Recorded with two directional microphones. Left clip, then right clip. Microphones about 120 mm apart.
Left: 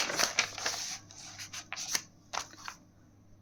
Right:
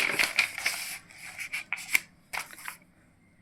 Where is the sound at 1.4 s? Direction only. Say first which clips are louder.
Right 7 dB; 50° left (ahead or behind).